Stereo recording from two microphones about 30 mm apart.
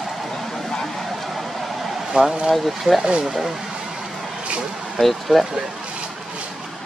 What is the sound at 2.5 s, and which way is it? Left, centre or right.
Speech, centre.